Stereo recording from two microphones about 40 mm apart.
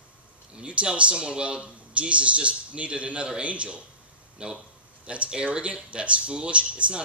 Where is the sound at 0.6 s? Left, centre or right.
Right.